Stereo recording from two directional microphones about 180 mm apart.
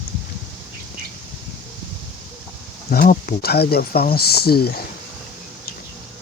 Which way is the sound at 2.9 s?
55° left (ahead or behind).